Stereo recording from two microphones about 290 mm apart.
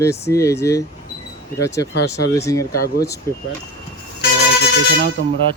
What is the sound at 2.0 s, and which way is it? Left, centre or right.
Speech, left.